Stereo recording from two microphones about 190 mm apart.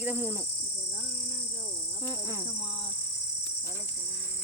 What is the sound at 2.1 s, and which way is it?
Speech, 20° right (ahead or behind).